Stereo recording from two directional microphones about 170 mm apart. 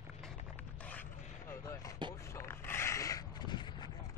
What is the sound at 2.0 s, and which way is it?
Vehicle, 25° right (ahead or behind).